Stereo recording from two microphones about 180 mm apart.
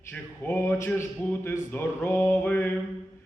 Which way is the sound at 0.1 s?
10° left (ahead or behind).